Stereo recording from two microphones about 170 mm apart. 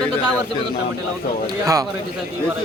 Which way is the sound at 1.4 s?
20° right (ahead or behind).